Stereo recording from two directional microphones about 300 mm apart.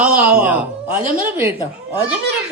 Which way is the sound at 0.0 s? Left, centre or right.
Centre.